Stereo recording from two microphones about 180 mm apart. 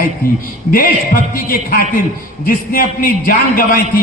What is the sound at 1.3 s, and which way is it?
A man's voice, 55° left (ahead or behind).